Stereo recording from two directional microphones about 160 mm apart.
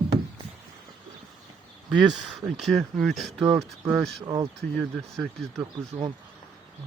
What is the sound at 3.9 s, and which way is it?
Speech, centre (ahead or behind).